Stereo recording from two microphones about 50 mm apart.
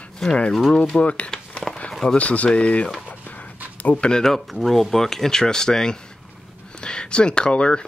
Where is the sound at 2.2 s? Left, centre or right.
Left.